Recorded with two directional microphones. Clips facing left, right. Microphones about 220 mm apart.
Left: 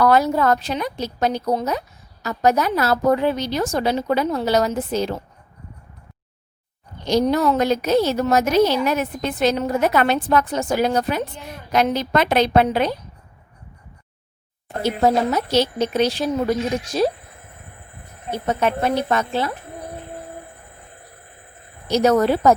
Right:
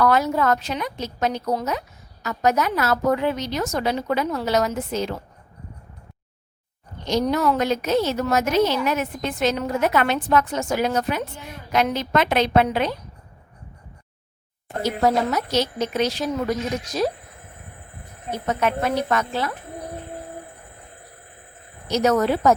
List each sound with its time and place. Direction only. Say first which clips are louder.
0.0 s a woman's voice: left 3 dB; 35° left (ahead or behind)
7.0 s a woman's voice: left 3 dB; 35° left (ahead or behind)
14.8 s speech: left 2 dB; 30° left (ahead or behind)
18.3 s speech: left 2 dB; 30° left (ahead or behind)
21.8 s a woman's voice: left 3 dB; 30° left (ahead or behind)